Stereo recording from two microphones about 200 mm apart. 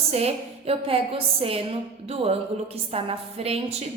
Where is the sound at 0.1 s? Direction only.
30° right (ahead or behind).